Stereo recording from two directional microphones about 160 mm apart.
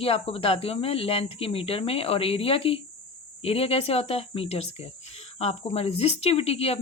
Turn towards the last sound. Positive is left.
turn(degrees=40)  # may be behind; listen again after turning